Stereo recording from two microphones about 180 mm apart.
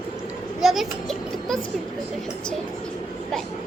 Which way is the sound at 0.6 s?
Centre (ahead or behind).